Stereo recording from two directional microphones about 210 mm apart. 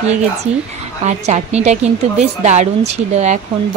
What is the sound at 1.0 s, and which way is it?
A woman's voice, 30° right (ahead or behind).